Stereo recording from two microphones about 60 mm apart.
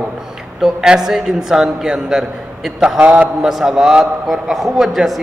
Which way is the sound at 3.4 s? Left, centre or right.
Centre.